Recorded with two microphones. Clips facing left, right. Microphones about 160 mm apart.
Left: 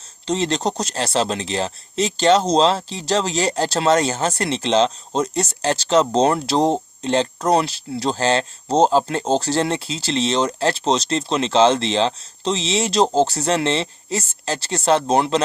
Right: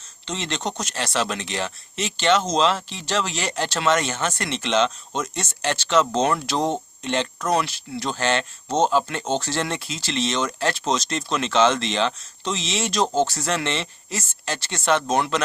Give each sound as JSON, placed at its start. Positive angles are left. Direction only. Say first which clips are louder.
{"t": 0.3, "sound": "speech", "louder": "left 7 dB", "side_deg": 35}